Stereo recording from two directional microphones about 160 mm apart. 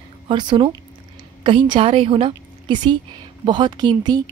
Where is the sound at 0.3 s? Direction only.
30° right (ahead or behind).